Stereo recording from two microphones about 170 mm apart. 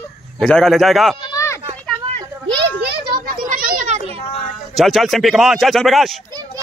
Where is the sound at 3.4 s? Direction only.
60° right (ahead or behind).